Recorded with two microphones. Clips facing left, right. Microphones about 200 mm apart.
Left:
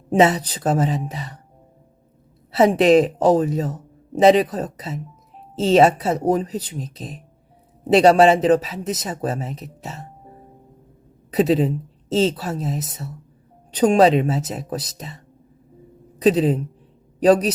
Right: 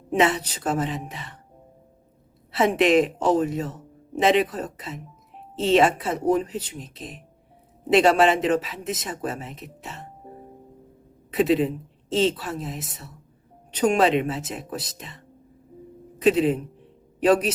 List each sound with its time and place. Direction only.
0.1 s speech: 35° left (ahead or behind)
2.6 s speech: 35° left (ahead or behind)
11.3 s speech: 40° left (ahead or behind)
16.1 s speech: 35° left (ahead or behind)